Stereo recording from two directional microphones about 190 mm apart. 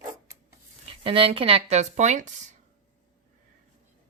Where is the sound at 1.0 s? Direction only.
30° right (ahead or behind).